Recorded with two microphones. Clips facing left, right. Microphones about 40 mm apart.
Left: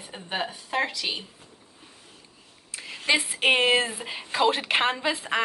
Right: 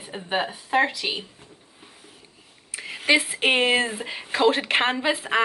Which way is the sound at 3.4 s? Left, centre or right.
Centre.